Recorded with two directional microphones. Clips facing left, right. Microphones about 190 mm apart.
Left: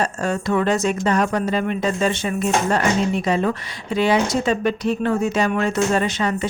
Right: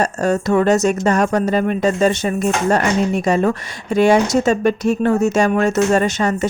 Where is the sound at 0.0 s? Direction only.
40° right (ahead or behind).